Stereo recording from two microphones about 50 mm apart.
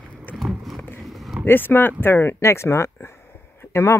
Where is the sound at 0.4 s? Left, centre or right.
Centre.